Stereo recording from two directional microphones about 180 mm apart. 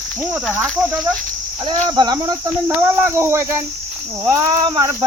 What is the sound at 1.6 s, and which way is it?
Speech, 25° right (ahead or behind).